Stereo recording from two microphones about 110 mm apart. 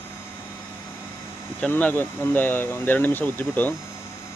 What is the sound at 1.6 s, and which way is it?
Speech, 15° left (ahead or behind).